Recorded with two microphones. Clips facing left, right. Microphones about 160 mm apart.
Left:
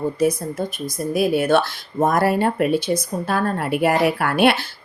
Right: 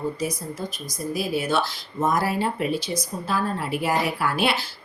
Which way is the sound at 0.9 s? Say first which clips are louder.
Left 7 dB; 60° left (ahead or behind).